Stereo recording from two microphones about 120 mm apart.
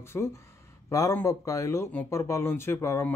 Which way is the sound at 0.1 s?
20° left (ahead or behind).